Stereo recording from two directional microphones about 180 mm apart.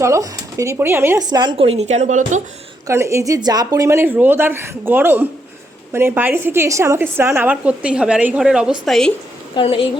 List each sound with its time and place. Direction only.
0.0 s speech: 15° right (ahead or behind); by 2.4 s 45° right (ahead or behind)
2.8 s a woman's voice: 15° right (ahead or behind); by 9.1 s centre (ahead or behind)
9.6 s a woman's voice: 30° left (ahead or behind)